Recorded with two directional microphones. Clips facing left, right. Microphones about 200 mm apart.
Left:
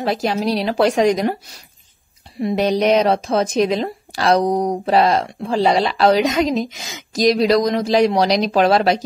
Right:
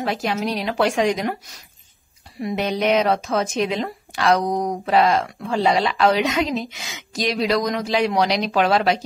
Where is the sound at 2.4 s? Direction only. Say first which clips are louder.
Left 5 dB; 35° left (ahead or behind).